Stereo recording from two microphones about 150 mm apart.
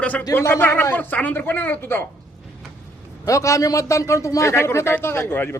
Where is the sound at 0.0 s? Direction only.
10° left (ahead or behind).